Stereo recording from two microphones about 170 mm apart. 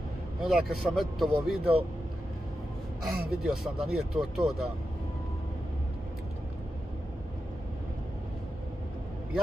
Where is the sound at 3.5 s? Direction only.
5° right (ahead or behind).